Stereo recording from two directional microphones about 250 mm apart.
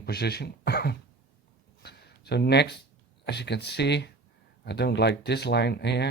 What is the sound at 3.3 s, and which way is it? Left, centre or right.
Speech, left.